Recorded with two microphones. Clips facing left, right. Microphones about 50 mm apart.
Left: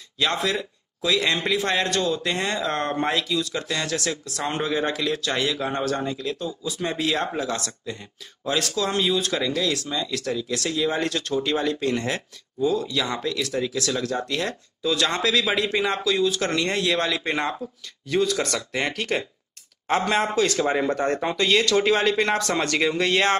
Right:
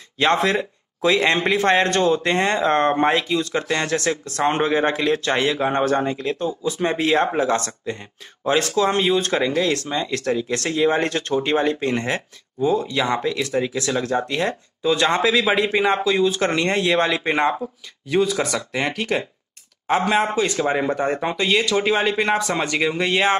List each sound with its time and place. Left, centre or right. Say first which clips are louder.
0.2 s a man's voice: right 6 dB; right; by 23.3 s centre